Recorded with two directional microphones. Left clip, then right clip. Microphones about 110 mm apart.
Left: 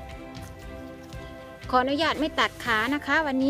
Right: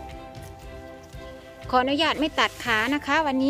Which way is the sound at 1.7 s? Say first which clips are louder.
Right 1 dB; 25° right (ahead or behind).